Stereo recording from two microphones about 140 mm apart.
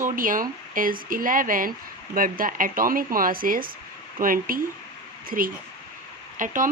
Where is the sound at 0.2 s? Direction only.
80° right.